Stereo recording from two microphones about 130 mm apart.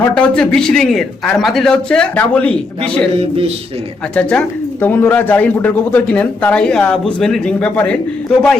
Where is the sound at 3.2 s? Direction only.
50° right (ahead or behind).